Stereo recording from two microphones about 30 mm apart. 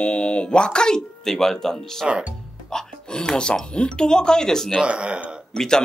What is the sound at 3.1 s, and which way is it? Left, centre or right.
Speech, left.